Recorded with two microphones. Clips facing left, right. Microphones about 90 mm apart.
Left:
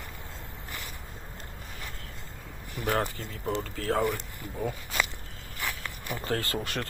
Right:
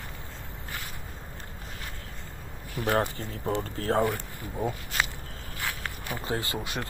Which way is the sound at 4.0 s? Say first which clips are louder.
Right 3 dB; 20° right (ahead or behind).